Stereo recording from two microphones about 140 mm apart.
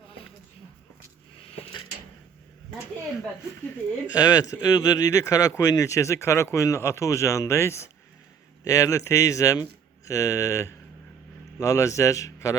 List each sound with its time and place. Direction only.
4.1 s speech: 25° left (ahead or behind)